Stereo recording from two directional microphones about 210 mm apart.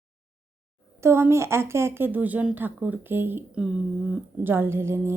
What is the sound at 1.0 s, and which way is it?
A woman's voice, 10° right (ahead or behind).